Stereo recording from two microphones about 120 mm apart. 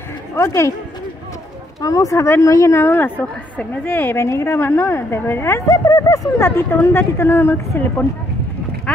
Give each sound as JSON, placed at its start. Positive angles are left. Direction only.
{"t": 0.4, "sound": "a woman's voice", "side_deg": 25}
{"t": 1.8, "sound": "a woman's voice", "side_deg": 30}
{"t": 8.9, "sound": "a sound", "side_deg": 10}